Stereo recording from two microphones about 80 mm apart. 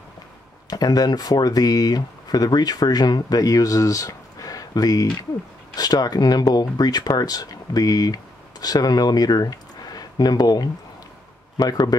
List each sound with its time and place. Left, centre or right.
0.7 s a man's voice: left